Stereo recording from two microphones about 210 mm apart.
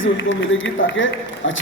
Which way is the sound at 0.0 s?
65° left (ahead or behind).